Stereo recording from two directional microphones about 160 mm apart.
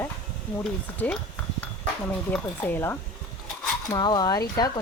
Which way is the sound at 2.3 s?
10° left (ahead or behind).